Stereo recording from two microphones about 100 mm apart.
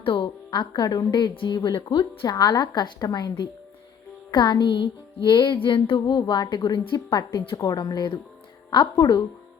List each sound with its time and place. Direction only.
0.0 s music: 55° left (ahead or behind)
2.3 s music: 40° left (ahead or behind)